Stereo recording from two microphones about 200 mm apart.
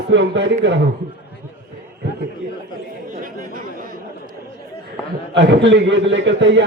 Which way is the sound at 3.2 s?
45° right (ahead or behind).